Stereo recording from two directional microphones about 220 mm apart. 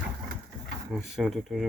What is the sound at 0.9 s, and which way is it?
Speech, centre (ahead or behind).